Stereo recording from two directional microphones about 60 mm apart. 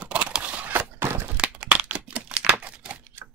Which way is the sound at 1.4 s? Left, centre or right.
Centre.